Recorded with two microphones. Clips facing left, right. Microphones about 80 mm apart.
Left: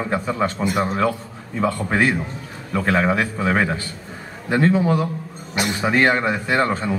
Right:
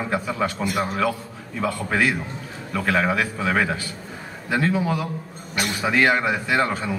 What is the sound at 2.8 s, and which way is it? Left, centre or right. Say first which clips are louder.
A man's voice: left 2 dB; left.